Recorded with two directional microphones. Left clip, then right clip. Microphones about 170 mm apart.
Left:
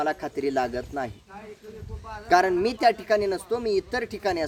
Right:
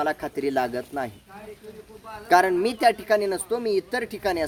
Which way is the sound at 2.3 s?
25° right (ahead or behind).